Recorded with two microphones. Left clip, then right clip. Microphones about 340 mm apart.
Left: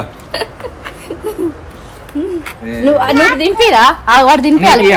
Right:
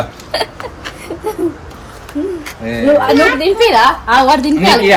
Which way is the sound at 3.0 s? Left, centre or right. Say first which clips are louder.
Even; left.